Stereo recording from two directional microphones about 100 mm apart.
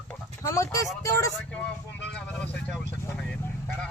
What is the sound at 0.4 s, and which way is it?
Speech, 30° left (ahead or behind).